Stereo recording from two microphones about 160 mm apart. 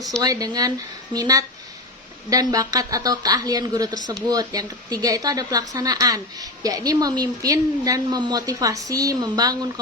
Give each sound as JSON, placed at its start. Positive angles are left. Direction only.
{"t": 0.2, "sound": "a woman's voice", "side_deg": -25}